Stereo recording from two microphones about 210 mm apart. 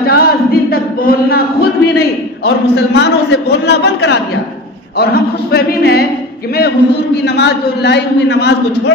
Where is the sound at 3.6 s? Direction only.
55° left (ahead or behind).